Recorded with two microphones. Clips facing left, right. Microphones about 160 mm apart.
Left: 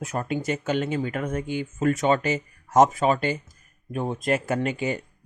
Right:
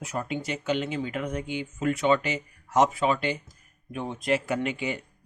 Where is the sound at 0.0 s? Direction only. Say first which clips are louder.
Left 4 dB; 50° left (ahead or behind).